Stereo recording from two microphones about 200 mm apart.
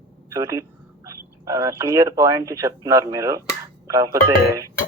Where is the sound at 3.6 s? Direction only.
15° right (ahead or behind).